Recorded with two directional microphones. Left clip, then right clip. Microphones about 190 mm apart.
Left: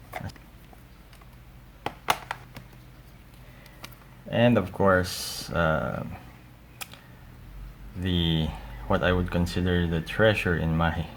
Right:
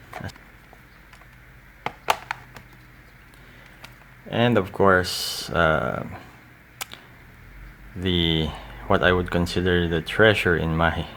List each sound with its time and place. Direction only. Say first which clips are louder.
1.8 s a sound: right 3 dB; 20° right (ahead or behind)
4.3 s speech: right 2 dB; 30° right (ahead or behind)
8.0 s speech: right 6 dB; 30° right (ahead or behind)